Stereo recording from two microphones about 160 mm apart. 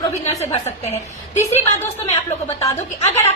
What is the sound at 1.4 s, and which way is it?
A woman's voice, 45° left (ahead or behind).